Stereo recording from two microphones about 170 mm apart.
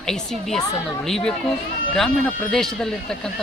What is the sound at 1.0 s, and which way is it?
Speech, centre (ahead or behind).